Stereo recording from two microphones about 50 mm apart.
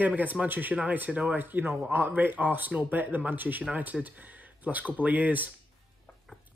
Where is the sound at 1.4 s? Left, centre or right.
Right.